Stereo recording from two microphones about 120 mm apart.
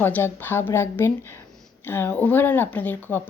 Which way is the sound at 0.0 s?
15° left (ahead or behind).